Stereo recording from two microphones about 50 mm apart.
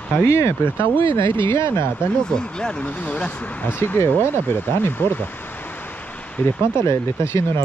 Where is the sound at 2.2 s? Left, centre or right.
Centre.